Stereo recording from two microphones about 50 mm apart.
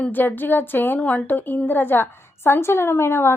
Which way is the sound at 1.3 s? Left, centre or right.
Left.